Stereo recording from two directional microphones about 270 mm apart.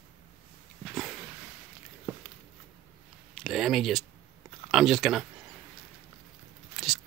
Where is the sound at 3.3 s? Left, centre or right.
Centre.